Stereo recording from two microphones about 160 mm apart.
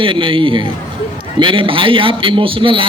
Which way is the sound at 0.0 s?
30° right (ahead or behind).